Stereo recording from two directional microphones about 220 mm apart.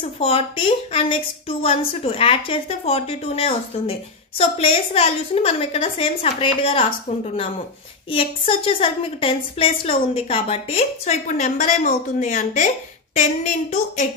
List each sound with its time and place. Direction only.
0.0 s a woman's voice: 25° left (ahead or behind)
8.1 s a woman's voice: 25° left (ahead or behind)